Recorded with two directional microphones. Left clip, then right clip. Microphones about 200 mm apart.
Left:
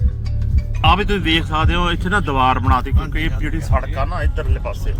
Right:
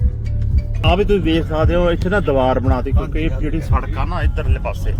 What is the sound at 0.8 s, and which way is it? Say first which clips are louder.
Speech: even; centre (ahead or behind).